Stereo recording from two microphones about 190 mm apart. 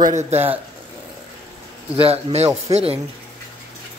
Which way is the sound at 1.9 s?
30° right (ahead or behind).